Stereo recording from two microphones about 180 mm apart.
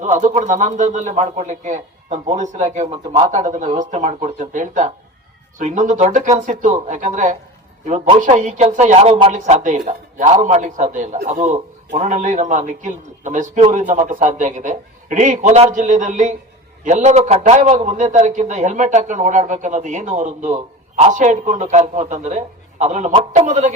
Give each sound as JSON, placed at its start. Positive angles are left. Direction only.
{"t": 0.0, "sound": "a man's voice", "side_deg": -45}